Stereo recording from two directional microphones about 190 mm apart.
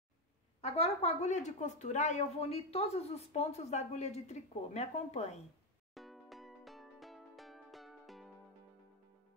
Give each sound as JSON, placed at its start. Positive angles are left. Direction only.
{"t": 0.6, "sound": "a woman's voice", "side_deg": 35}
{"t": 5.9, "sound": "music", "side_deg": 0}